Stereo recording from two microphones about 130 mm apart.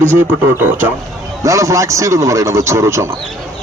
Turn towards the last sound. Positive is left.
turn(degrees=-20)  # may be behind; listen again after turning